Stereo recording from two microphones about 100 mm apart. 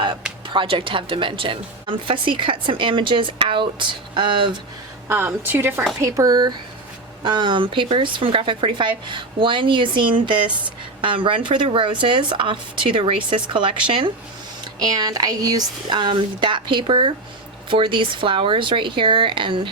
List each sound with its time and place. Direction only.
0.4 s a woman's voice: 55° right (ahead or behind)
5.0 s speech: 20° right (ahead or behind)
6.0 s a woman's voice: 35° right (ahead or behind); by 14.1 s 55° right (ahead or behind)
14.6 s a woman's voice: 40° right (ahead or behind)